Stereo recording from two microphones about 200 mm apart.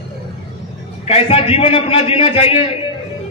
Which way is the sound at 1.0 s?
30° left (ahead or behind).